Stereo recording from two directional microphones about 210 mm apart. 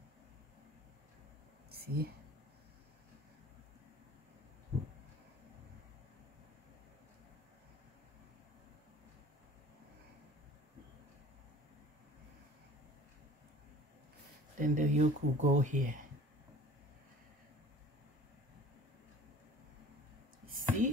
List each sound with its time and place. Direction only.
1.7 s whispering: 45° right (ahead or behind)
14.6 s speech: 35° right (ahead or behind)
20.4 s a sound: 40° right (ahead or behind)